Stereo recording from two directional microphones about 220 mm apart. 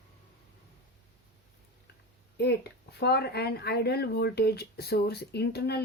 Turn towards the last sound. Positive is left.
turn(degrees=50)  # may be behind; listen again after turning